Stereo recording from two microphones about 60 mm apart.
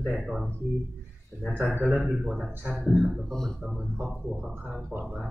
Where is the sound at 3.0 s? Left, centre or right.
Centre.